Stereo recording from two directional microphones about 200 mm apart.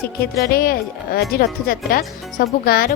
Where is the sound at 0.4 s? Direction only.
50° left (ahead or behind).